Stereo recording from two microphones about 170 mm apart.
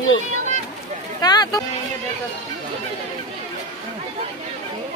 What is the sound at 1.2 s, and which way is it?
Speech, 25° left (ahead or behind).